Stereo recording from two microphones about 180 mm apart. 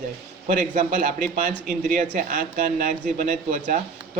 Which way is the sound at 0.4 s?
45° right (ahead or behind).